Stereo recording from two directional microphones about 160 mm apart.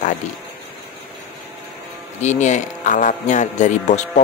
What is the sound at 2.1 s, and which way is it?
Speech, 50° left (ahead or behind).